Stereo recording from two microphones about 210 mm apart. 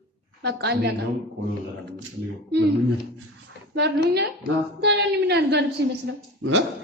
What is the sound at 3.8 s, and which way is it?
A woman's voice, 50° right (ahead or behind).